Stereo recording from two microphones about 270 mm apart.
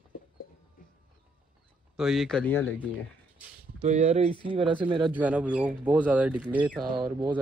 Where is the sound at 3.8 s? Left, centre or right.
Right.